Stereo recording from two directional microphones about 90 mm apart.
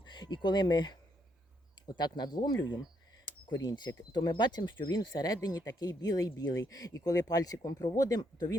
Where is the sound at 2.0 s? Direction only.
50° left (ahead or behind).